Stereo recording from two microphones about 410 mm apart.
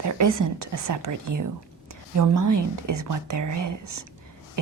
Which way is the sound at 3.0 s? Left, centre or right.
Right.